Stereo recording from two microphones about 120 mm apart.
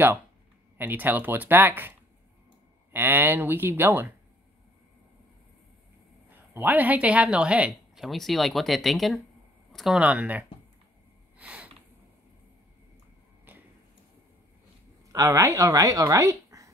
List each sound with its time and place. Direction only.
0.7 s speech: 15° right (ahead or behind)
6.5 s speech: 15° right (ahead or behind)
11.3 s a sound: 10° right (ahead or behind)
15.1 s speech: 25° right (ahead or behind)